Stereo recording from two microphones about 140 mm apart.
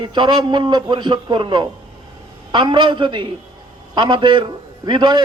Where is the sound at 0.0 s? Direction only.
35° right (ahead or behind).